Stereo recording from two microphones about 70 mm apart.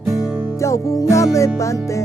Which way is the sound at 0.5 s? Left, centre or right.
Left.